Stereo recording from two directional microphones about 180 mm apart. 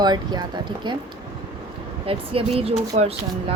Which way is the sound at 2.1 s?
30° right (ahead or behind).